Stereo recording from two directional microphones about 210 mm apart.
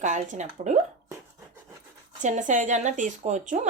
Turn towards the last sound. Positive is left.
turn(degrees=-35)  # may be behind; listen again after turning